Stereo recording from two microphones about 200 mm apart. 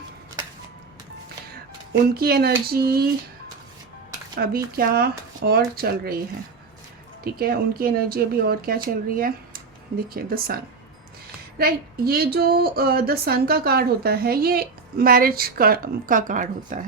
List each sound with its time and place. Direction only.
1.9 s speech: 50° right (ahead or behind)
4.4 s speech: 50° right (ahead or behind)
7.3 s speech: 50° right (ahead or behind)